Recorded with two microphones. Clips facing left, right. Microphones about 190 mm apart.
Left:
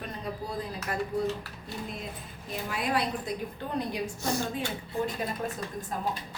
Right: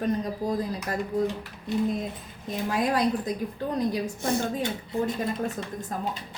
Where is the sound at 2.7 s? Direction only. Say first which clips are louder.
Right 5 dB; 40° right (ahead or behind).